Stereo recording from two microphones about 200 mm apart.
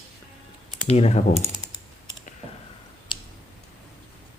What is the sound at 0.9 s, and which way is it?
Speech, 30° left (ahead or behind).